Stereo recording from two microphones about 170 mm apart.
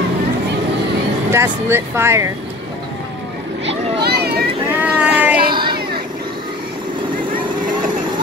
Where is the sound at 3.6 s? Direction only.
70° right (ahead or behind).